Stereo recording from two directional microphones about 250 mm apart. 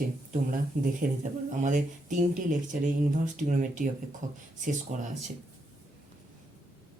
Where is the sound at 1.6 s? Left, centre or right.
Right.